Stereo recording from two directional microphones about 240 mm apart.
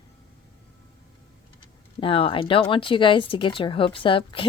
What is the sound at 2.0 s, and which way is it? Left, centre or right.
Speech, left.